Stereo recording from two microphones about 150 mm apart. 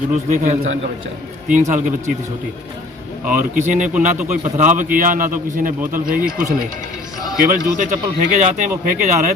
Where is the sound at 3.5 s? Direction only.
55° right (ahead or behind).